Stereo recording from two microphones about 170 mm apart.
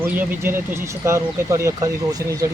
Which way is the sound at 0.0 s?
10° right (ahead or behind).